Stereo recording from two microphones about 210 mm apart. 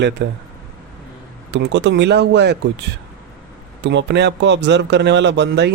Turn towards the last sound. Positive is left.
turn(degrees=-55)  # may be behind; listen again after turning